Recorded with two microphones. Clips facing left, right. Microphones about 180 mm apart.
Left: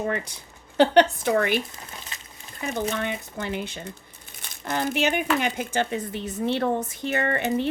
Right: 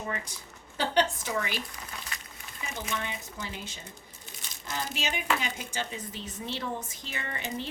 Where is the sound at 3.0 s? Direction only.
60° left (ahead or behind).